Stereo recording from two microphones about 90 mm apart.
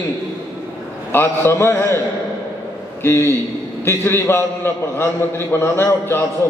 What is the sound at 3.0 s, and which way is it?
A man's voice, 25° left (ahead or behind).